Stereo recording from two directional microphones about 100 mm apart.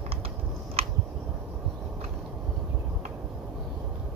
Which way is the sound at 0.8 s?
80° right.